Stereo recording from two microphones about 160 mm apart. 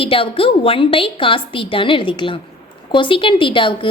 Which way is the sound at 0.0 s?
35° left (ahead or behind).